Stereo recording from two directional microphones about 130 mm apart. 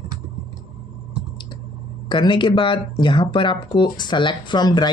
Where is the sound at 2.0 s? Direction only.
40° left (ahead or behind).